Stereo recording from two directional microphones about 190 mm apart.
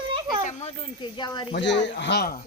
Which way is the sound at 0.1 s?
20° right (ahead or behind).